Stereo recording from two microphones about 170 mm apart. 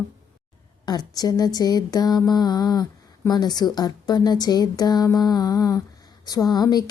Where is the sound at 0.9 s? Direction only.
25° left (ahead or behind).